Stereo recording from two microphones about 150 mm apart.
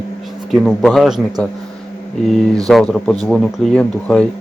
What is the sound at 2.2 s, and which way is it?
Speech, centre (ahead or behind).